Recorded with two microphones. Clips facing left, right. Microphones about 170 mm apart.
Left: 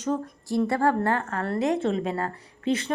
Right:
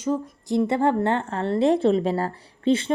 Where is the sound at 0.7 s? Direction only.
20° right (ahead or behind).